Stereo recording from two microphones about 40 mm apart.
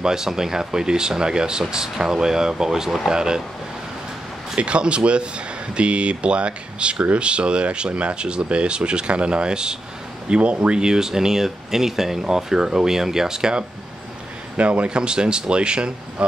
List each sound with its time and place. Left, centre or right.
0.0 s speech: centre
4.6 s speech: right
14.6 s speech: right